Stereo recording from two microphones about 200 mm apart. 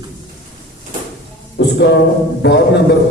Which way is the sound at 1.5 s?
60° left (ahead or behind).